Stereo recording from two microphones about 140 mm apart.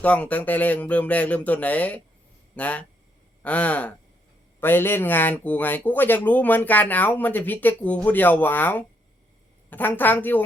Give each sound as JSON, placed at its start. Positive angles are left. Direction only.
{"t": 0.0, "sound": "speech", "side_deg": 10}